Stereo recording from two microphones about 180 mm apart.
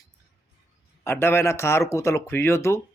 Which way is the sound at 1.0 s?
15° left (ahead or behind).